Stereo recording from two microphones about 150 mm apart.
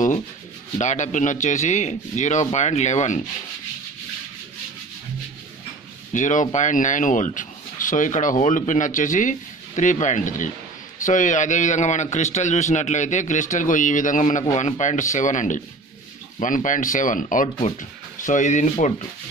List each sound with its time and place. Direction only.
0.7 s speech: 55° left (ahead or behind)
6.1 s speech: 55° left (ahead or behind)